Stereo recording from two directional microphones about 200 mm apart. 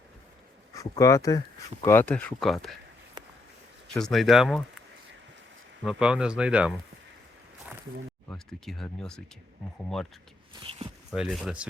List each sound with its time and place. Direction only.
0.7 s speech: 15° left (ahead or behind); by 2.7 s centre (ahead or behind)
3.2 s a sound: 20° right (ahead or behind)
3.9 s speech: centre (ahead or behind)
5.8 s speech: 5° right (ahead or behind)
8.3 s speech: centre (ahead or behind)
10.5 s speech: 25° right (ahead or behind)
11.1 s speech: centre (ahead or behind)